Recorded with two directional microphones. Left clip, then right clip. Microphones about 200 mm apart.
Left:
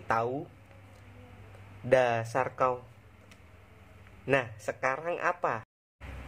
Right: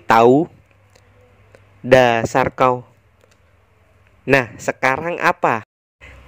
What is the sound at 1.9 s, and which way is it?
Speech, 45° right (ahead or behind).